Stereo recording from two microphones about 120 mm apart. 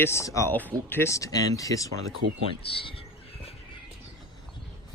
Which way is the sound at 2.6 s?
50° left (ahead or behind).